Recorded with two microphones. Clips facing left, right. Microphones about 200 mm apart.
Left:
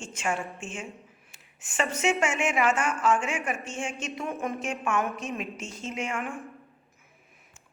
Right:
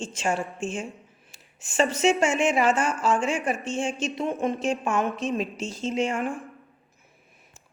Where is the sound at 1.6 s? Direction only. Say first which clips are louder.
Right 6 dB; 30° right (ahead or behind).